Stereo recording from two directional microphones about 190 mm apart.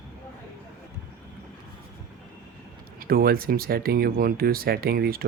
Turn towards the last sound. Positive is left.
turn(degrees=-50)  # may be behind; listen again after turning